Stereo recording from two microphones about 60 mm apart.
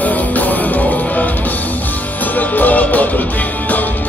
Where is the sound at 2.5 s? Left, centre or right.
Left.